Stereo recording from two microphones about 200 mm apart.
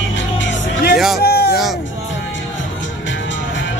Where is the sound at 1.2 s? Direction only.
50° left (ahead or behind).